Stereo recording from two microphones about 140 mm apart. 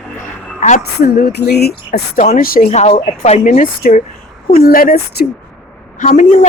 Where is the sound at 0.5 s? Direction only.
65° left (ahead or behind); by 2.7 s 85° left.